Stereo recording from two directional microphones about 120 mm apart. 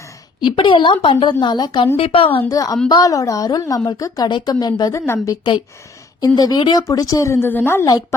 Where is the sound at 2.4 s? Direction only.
30° left (ahead or behind).